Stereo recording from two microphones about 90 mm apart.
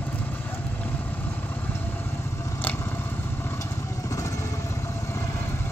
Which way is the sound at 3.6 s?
35° left (ahead or behind).